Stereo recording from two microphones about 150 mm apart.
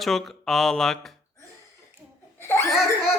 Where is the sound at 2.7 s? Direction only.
5° right (ahead or behind).